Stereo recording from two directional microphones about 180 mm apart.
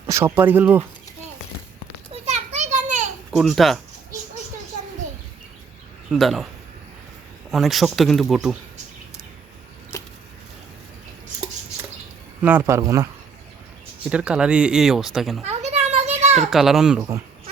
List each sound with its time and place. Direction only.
0.0 s speech: 15° right (ahead or behind)
2.3 s children playing: 40° right (ahead or behind)
3.3 s speech: centre (ahead or behind)
6.1 s speech: centre (ahead or behind)
7.5 s speech: centre (ahead or behind)
12.4 s speech: 10° right (ahead or behind)
14.1 s speech: 5° right (ahead or behind)
15.4 s a sound: 35° right (ahead or behind)
16.5 s speech: centre (ahead or behind)